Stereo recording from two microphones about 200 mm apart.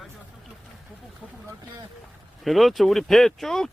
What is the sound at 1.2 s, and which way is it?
Vehicle, 5° right (ahead or behind).